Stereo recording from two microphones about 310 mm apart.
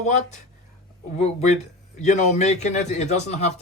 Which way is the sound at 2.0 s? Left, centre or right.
Left.